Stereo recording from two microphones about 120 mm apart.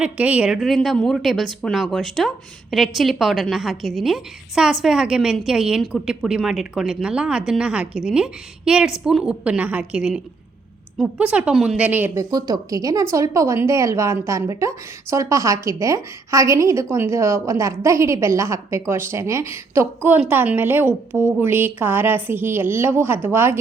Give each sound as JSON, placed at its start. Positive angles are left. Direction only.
{"t": 0.0, "sound": "a woman's voice", "side_deg": -10}
{"t": 12.1, "sound": "a woman's voice", "side_deg": -30}